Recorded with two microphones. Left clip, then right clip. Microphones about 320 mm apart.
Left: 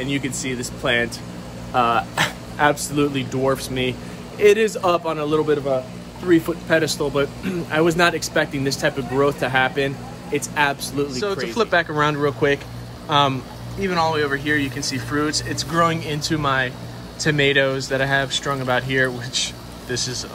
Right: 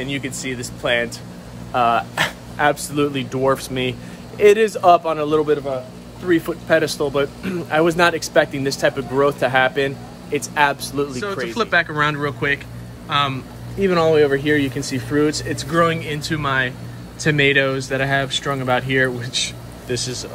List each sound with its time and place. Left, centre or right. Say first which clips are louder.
0.0 s speech: left 1 dB; centre
11.1 s speech: left 1 dB; centre